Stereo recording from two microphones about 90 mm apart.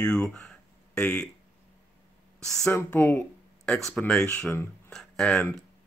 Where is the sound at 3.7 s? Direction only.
5° left (ahead or behind).